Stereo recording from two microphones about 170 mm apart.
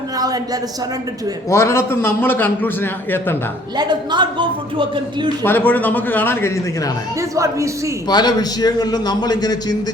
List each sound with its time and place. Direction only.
0.2 s a sound: 20° right (ahead or behind)
1.5 s a man's voice: 15° left (ahead or behind)
3.8 s a woman's voice: 25° right (ahead or behind)
5.4 s a man's voice: 10° left (ahead or behind)
7.2 s speech: 20° right (ahead or behind)
8.0 s a man's voice: 25° left (ahead or behind)